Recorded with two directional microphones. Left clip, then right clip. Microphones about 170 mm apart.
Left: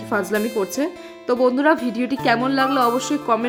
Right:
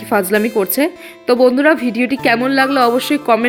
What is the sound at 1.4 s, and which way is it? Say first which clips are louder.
Speech: right 4 dB; 10° right (ahead or behind).